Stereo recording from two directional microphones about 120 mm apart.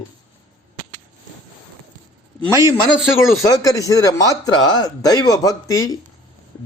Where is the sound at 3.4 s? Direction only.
30° left (ahead or behind).